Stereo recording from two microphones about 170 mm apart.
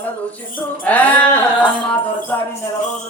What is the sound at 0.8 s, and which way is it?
Speech, 10° left (ahead or behind).